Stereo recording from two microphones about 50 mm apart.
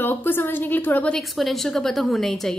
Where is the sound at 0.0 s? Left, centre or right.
Left.